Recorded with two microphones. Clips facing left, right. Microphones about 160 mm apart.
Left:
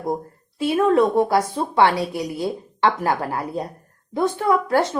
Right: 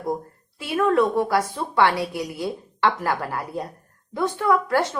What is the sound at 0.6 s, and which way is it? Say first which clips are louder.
Speech: left 3 dB; 25° left (ahead or behind).